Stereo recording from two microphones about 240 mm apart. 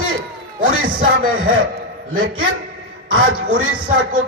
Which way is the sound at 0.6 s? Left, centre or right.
Right.